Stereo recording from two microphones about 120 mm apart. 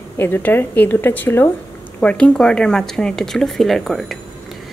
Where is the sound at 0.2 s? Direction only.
15° left (ahead or behind).